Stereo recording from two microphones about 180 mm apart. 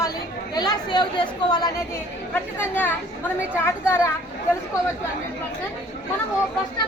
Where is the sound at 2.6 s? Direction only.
10° left (ahead or behind).